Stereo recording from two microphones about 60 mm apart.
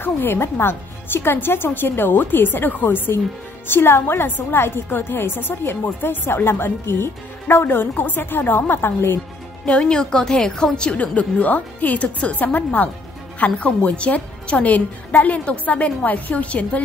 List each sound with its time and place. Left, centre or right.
0.0 s a woman's voice: left
9.7 s a woman's voice: centre